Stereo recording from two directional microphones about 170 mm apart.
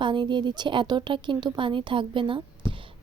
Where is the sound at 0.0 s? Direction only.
25° right (ahead or behind).